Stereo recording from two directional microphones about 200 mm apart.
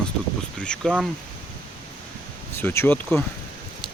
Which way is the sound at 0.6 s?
5° left (ahead or behind).